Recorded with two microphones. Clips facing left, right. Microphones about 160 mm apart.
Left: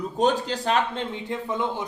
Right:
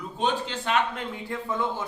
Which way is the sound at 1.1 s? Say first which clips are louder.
Left 2 dB; 20° left (ahead or behind).